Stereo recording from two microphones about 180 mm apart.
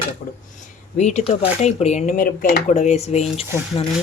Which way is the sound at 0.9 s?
40° left (ahead or behind).